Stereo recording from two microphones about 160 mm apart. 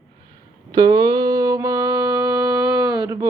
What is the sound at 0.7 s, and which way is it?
Mantra, 25° right (ahead or behind).